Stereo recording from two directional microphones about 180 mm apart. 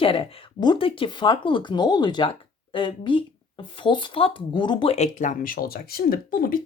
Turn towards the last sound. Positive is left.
turn(degrees=50)  # may be behind; listen again after turning